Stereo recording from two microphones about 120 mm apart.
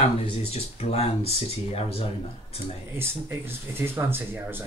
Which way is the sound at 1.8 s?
55° left (ahead or behind).